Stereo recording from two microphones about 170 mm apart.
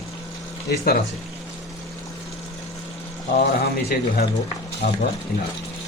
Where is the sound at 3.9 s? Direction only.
70° left (ahead or behind).